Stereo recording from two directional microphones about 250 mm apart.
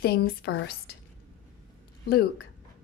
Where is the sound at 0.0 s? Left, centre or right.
Left.